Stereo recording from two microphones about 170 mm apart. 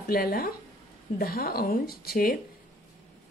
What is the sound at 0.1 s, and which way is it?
Speech, 60° left (ahead or behind).